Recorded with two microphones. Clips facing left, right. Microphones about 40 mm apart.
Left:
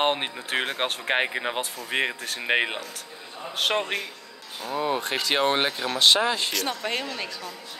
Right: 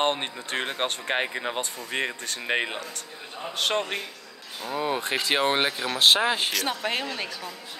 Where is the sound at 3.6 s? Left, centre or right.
Centre.